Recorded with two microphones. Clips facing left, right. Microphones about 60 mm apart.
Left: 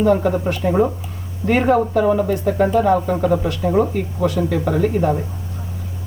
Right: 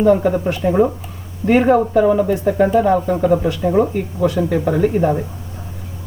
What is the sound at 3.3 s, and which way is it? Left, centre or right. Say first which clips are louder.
Speech: right 3 dB; right.